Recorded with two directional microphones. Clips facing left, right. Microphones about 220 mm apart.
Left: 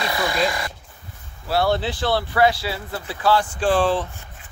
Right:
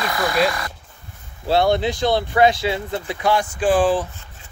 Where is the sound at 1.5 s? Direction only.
20° right (ahead or behind).